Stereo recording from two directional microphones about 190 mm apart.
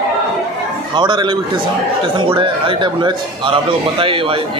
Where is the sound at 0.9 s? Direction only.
25° right (ahead or behind).